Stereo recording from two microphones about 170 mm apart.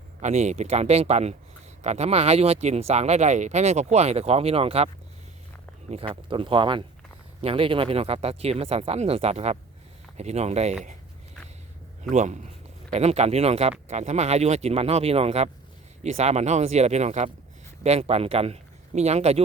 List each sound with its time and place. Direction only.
0.2 s speech: 40° right (ahead or behind)
5.9 s speech: 35° right (ahead or behind)
12.1 s a man's voice: 45° right (ahead or behind)